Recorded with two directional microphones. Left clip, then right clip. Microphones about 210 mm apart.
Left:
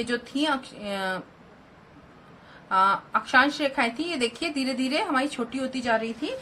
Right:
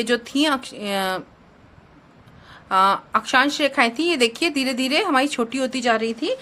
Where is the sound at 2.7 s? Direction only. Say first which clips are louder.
Right 4 dB; 50° right (ahead or behind).